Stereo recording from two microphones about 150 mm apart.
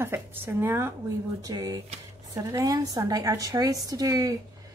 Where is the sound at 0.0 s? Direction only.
15° right (ahead or behind).